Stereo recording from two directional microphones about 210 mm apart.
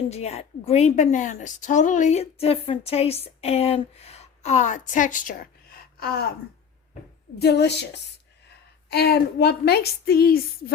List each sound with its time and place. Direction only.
0.1 s a woman's voice: 30° left (ahead or behind); by 6.2 s 45° left (ahead or behind)
7.3 s a woman's voice: 50° left (ahead or behind)
8.9 s a woman's voice: 50° left (ahead or behind)